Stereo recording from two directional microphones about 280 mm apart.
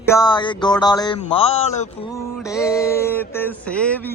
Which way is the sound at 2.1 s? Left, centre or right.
Centre.